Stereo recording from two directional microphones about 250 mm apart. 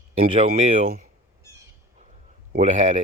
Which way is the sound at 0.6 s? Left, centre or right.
Right.